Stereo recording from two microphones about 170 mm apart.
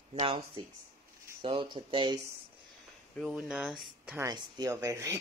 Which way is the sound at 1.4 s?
30° right (ahead or behind).